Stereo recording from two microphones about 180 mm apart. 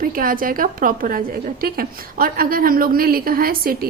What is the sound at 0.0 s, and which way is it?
A woman's voice, 50° right (ahead or behind).